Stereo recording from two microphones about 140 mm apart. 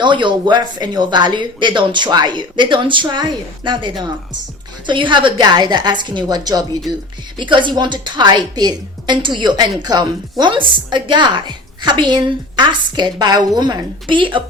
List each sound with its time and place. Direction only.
0.0 s a woman's voice: 35° right (ahead or behind)